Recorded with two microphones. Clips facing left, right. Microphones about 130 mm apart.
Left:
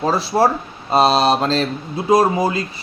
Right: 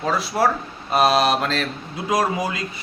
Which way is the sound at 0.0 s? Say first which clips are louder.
Left 4 dB; 30° left (ahead or behind).